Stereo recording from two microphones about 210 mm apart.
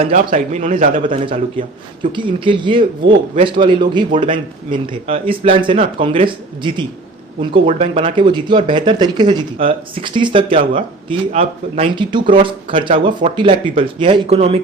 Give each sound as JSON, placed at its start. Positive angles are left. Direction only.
{"t": 0.0, "sound": "a man's voice", "side_deg": -40}
{"t": 1.2, "sound": "speech", "side_deg": -25}